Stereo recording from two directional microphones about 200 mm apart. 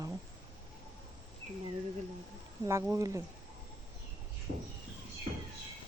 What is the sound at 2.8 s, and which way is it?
Speech, 15° right (ahead or behind).